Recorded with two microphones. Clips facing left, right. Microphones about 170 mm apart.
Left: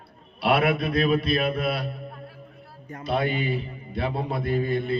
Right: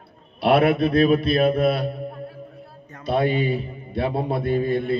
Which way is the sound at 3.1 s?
30° right (ahead or behind).